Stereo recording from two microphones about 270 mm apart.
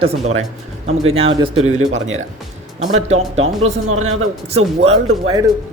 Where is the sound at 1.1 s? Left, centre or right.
Right.